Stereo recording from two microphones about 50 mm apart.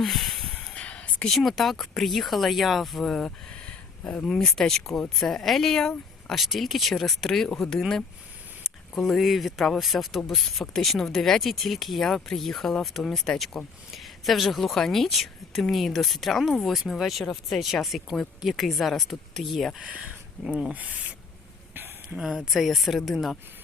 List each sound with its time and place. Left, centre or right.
0.0 s a sound: centre
0.6 s a sound: left
1.3 s speech: centre
3.7 s a sound: left
4.3 s speech: centre
9.0 s speech: centre
19.8 s speech: centre
20.7 s speech: right
22.4 s speech: centre